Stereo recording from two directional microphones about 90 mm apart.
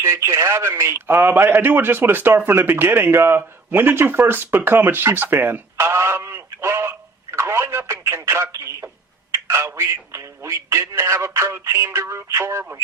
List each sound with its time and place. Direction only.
0.0 s speech: 30° right (ahead or behind)
5.7 s telephone: 30° right (ahead or behind)
9.3 s speech: 30° right (ahead or behind)